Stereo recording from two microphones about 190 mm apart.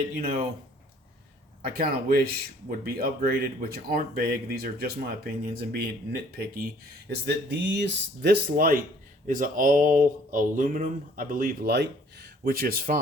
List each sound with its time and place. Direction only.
0.2 s speech: 50° right (ahead or behind)
1.6 s speech: 50° right (ahead or behind)